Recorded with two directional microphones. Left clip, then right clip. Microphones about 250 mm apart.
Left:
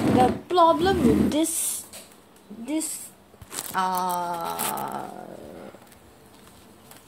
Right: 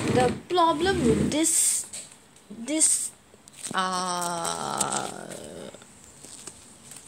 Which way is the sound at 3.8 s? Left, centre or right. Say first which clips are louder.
Left 2 dB; centre.